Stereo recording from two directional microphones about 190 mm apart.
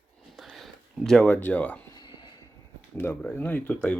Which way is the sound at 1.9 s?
20° left (ahead or behind).